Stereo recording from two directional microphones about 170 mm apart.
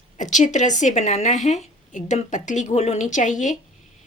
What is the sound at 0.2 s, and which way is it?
A woman's voice, 45° left (ahead or behind).